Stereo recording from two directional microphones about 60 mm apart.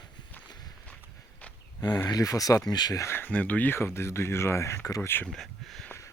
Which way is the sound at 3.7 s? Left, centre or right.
Left.